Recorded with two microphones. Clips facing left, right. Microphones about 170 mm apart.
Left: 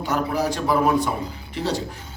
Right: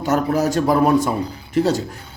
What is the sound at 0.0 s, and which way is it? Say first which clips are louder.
A man's voice: right 5 dB; 45° right (ahead or behind).